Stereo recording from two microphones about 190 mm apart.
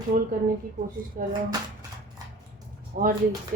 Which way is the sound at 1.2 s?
50° right (ahead or behind).